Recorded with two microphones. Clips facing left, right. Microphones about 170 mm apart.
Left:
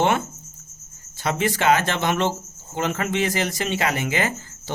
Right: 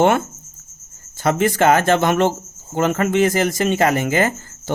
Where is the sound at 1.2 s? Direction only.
50° right (ahead or behind).